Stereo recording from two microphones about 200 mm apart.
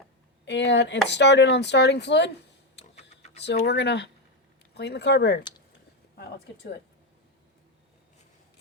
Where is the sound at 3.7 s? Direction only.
55° left (ahead or behind).